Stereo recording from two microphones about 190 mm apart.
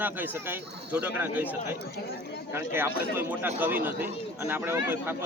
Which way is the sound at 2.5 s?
10° right (ahead or behind).